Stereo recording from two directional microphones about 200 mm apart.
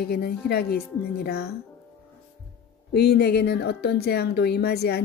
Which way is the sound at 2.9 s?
55° left (ahead or behind).